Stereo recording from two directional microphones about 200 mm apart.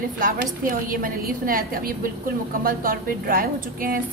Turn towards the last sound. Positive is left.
turn(degrees=-45)  # may be behind; listen again after turning